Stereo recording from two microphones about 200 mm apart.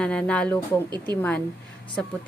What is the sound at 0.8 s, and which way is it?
Speech, 20° right (ahead or behind).